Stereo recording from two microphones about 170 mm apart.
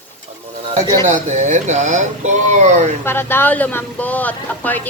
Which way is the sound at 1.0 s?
45° right (ahead or behind).